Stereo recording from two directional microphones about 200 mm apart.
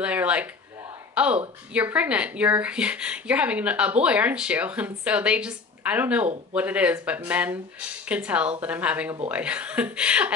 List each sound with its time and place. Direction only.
0.0 s a woman's voice: 5° right (ahead or behind)